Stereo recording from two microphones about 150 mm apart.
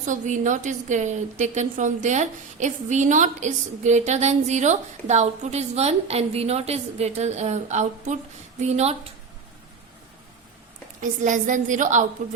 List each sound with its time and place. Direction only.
0.0 s a woman's voice: 55° right (ahead or behind)
11.0 s a woman's voice: 55° right (ahead or behind)